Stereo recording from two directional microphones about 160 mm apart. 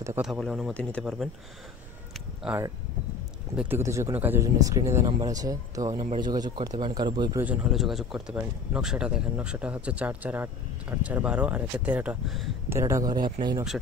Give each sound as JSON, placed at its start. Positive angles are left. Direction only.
{"t": 0.2, "sound": "speech", "side_deg": 0}
{"t": 2.4, "sound": "speech", "side_deg": -5}
{"t": 7.3, "sound": "speech", "side_deg": -10}
{"t": 12.6, "sound": "speech", "side_deg": -20}